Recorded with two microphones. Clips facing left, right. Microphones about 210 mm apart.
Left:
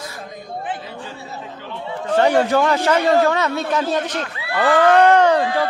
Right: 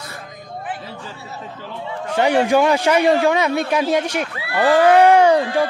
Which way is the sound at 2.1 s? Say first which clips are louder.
Even; 10° right (ahead or behind).